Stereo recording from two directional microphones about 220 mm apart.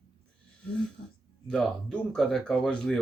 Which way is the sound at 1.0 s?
50° left (ahead or behind).